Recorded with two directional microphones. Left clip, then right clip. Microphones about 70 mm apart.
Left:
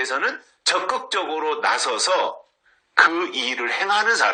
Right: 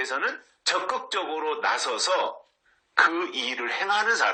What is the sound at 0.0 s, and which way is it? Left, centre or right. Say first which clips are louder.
A man's voice: left 5 dB; left.